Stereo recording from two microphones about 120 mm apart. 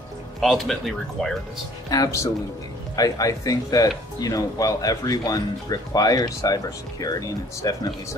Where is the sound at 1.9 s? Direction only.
25° left (ahead or behind).